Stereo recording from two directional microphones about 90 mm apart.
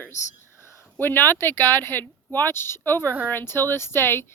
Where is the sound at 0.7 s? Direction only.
25° left (ahead or behind).